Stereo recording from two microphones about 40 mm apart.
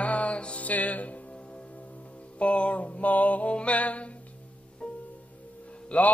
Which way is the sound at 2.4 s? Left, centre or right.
Left.